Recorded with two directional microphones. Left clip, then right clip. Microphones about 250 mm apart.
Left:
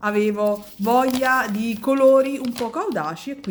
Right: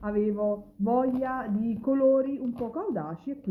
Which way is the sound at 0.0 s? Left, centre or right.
Left.